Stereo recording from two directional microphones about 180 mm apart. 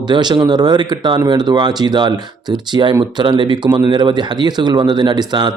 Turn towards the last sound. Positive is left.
turn(degrees=-25)  # may be behind; listen again after turning